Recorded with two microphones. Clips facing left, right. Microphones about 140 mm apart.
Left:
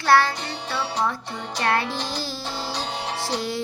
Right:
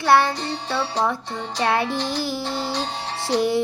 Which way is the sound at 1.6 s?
15° right (ahead or behind).